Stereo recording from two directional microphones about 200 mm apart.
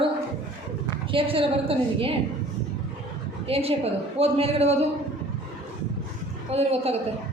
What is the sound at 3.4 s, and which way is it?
A woman's voice, 30° right (ahead or behind).